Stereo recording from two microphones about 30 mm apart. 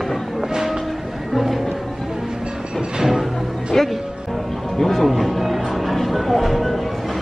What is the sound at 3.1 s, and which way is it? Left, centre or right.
Music, centre.